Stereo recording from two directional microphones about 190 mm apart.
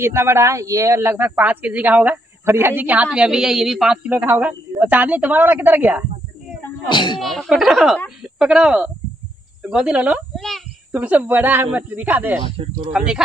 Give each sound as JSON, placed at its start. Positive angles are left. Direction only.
{"t": 0.0, "sound": "speech", "side_deg": -15}
{"t": 6.9, "sound": "speech", "side_deg": 25}
{"t": 7.2, "sound": "a woman's voice", "side_deg": 0}
{"t": 12.4, "sound": "speech", "side_deg": -30}
{"t": 12.9, "sound": "a woman's voice", "side_deg": -5}